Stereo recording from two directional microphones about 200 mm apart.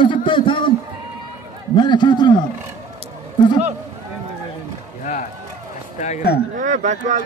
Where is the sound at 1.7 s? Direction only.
20° left (ahead or behind).